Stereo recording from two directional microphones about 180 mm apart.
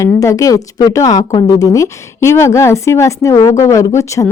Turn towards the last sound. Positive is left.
turn(degrees=15)  # may be behind; listen again after turning